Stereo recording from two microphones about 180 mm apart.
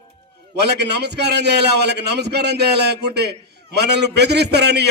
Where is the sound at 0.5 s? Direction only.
70° right (ahead or behind).